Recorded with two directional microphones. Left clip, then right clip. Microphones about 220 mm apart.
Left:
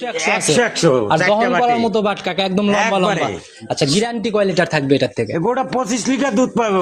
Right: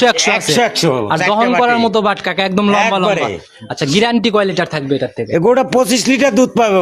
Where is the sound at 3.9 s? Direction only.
35° right (ahead or behind).